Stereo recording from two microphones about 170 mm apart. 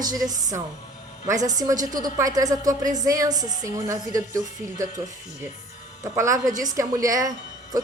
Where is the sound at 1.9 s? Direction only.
20° right (ahead or behind).